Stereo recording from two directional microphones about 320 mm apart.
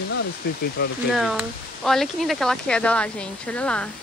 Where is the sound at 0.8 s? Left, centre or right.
Left.